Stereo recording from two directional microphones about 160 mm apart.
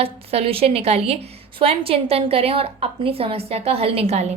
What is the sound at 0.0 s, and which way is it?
A woman's voice, 40° right (ahead or behind).